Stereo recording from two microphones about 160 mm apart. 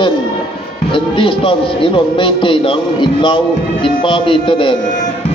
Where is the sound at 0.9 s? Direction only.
30° left (ahead or behind).